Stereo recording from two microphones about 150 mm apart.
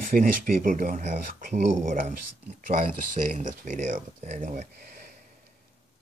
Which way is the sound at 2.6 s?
65° right (ahead or behind).